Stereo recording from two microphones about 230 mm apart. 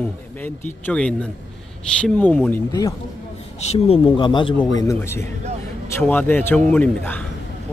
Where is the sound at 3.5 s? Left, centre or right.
Left.